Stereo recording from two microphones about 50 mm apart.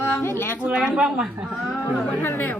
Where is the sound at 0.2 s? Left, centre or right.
Left.